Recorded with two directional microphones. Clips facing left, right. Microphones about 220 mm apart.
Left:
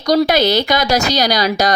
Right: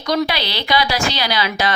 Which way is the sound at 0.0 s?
40° left (ahead or behind).